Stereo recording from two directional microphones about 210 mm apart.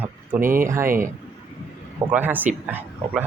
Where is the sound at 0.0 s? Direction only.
10° right (ahead or behind).